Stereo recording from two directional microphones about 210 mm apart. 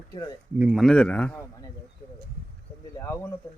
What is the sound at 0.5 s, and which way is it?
A man's voice, 5° right (ahead or behind).